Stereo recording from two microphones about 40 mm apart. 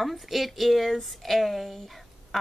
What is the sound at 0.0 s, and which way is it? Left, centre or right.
A woman's voice, centre.